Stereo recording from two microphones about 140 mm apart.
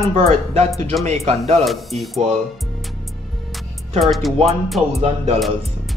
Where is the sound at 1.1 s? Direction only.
50° right (ahead or behind).